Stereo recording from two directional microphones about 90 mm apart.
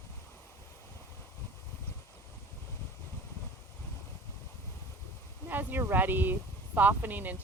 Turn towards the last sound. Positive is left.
turn(degrees=-20)  # may be behind; listen again after turning